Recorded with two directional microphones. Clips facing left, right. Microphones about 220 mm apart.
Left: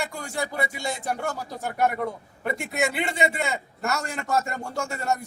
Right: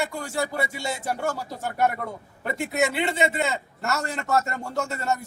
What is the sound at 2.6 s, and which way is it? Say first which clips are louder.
Speech: right 4 dB; 25° right (ahead or behind).